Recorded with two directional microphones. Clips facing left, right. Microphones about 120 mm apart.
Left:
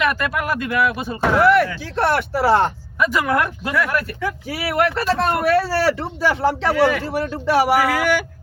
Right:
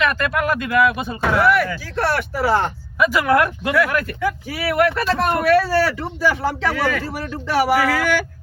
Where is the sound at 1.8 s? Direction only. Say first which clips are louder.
Left 2 dB; 25° left (ahead or behind).